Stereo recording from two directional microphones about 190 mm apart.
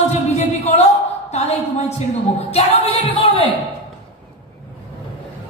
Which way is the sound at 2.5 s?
30° left (ahead or behind).